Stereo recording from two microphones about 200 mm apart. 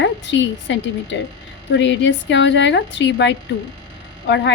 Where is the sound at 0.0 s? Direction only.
65° left (ahead or behind).